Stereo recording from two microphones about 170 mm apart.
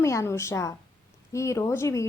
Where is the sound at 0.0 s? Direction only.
15° left (ahead or behind).